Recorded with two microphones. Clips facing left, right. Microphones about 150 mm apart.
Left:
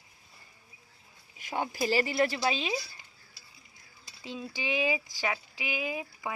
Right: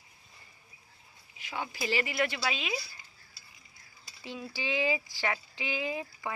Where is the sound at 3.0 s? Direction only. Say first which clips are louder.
Even; 65° left (ahead or behind).